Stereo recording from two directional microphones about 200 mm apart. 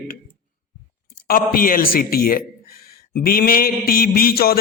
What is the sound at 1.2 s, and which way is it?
A man's voice, 45° left (ahead or behind).